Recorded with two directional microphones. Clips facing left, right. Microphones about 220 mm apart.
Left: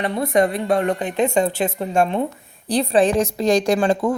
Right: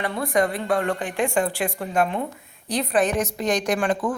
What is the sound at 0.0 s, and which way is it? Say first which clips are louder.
A woman's voice: left 4 dB; 25° left (ahead or behind).